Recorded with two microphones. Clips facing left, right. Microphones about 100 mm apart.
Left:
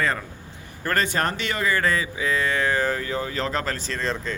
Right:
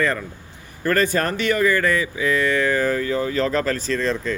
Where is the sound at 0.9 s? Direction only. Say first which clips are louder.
Right 3 dB; 20° left (ahead or behind).